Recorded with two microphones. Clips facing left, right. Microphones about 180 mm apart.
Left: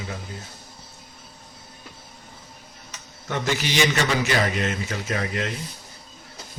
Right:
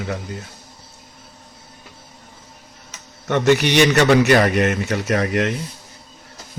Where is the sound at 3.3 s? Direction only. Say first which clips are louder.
Right 10 dB; 65° right (ahead or behind).